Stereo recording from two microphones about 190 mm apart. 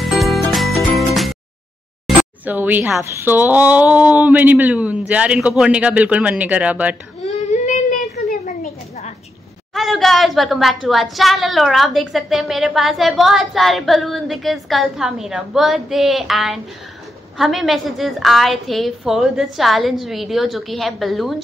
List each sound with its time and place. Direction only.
0.0 s music: centre (ahead or behind)
2.0 s speech: 10° right (ahead or behind)
7.2 s a sound: 40° left (ahead or behind)
9.8 s a woman's voice: centre (ahead or behind)